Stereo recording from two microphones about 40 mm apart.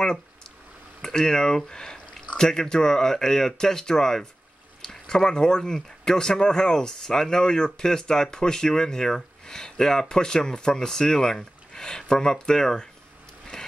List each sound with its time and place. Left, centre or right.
1.0 s speech: centre
11.7 s a sound: centre
12.1 s speech: centre